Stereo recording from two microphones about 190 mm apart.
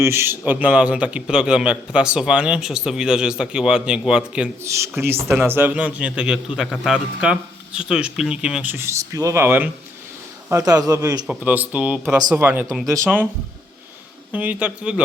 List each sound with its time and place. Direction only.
0.0 s a man's voice: 15° right (ahead or behind)
11.3 s a man's voice: 5° right (ahead or behind)
14.3 s a man's voice: 10° right (ahead or behind)